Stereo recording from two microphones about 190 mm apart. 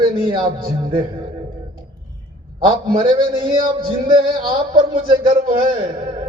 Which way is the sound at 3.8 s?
25° right (ahead or behind).